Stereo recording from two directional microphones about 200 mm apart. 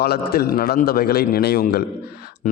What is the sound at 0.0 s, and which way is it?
A man's voice, 50° left (ahead or behind).